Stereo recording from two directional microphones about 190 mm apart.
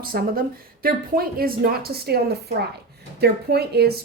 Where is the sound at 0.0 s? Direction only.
50° right (ahead or behind).